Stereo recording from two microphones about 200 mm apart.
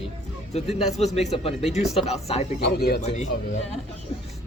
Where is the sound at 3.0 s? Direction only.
35° left (ahead or behind).